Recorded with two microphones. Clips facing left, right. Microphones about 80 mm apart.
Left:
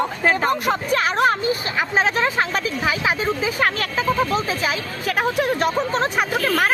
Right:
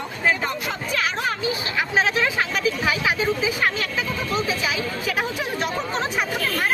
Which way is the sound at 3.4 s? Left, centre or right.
Left.